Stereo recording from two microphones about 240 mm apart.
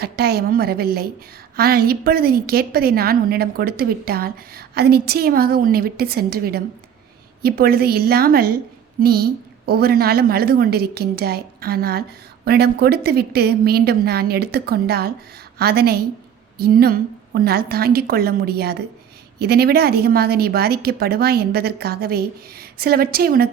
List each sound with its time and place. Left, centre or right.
0.0 s a woman's voice: right